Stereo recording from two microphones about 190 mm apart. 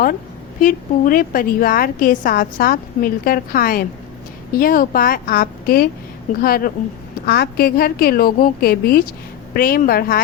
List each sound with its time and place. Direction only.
0.6 s a woman's voice: 50° left (ahead or behind)